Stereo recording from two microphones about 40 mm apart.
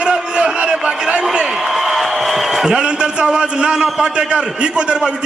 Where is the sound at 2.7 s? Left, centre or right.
Right.